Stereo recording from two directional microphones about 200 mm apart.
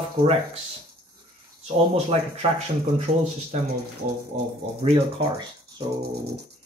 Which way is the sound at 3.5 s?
35° right (ahead or behind).